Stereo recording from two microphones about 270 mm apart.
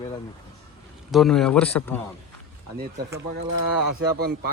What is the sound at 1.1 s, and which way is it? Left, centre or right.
Speech, centre.